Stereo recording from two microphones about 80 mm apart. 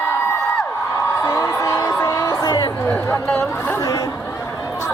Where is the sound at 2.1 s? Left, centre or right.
Left.